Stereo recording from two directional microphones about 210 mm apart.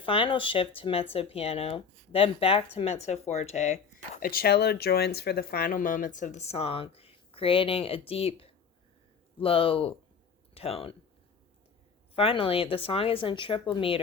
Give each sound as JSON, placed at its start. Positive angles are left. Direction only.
{"t": 0.0, "sound": "speech", "side_deg": 25}
{"t": 12.1, "sound": "speech", "side_deg": 25}